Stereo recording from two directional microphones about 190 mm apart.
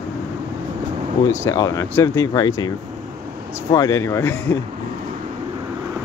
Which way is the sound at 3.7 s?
20° left (ahead or behind).